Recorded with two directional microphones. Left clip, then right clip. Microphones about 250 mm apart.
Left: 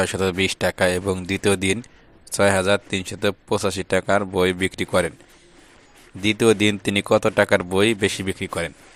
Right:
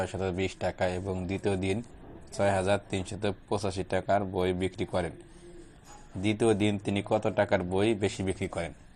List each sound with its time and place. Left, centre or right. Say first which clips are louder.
0.0 s speech: left 10 dB; left
6.2 s speech: left 9 dB; left